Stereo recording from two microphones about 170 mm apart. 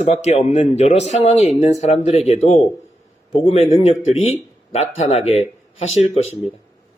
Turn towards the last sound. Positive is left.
turn(degrees=40)  # may be behind; listen again after turning